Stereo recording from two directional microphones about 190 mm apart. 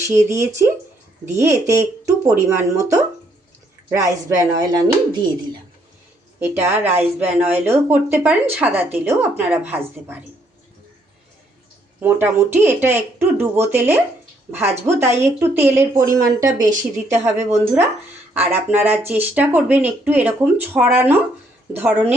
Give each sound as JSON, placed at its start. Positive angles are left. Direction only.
{"t": 0.0, "sound": "speech", "side_deg": -15}
{"t": 3.8, "sound": "speech", "side_deg": -15}
{"t": 6.4, "sound": "speech", "side_deg": -10}
{"t": 11.9, "sound": "speech", "side_deg": -10}
{"t": 16.5, "sound": "speech", "side_deg": -40}
{"t": 17.1, "sound": "speech", "side_deg": -15}